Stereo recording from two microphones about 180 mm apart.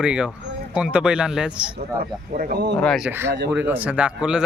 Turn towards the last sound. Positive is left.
turn(degrees=-5)  # may be behind; listen again after turning